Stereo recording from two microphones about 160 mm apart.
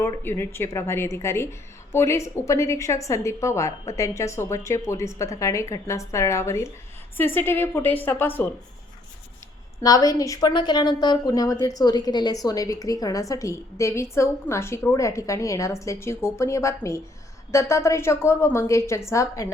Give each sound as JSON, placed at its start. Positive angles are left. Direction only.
{"t": 0.0, "sound": "a woman's voice", "side_deg": 15}
{"t": 9.8, "sound": "a woman's voice", "side_deg": 25}